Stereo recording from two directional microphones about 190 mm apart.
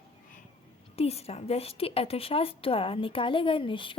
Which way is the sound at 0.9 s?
30° left (ahead or behind).